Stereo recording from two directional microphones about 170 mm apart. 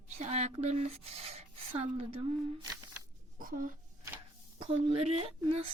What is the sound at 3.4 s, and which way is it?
Speech, 55° right (ahead or behind).